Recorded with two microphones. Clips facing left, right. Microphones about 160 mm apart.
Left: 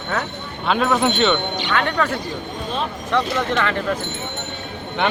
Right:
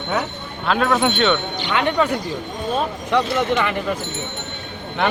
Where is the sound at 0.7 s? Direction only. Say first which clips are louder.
Even; centre (ahead or behind).